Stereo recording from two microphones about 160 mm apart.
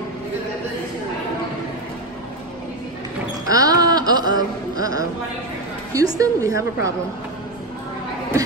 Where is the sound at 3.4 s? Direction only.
20° right (ahead or behind).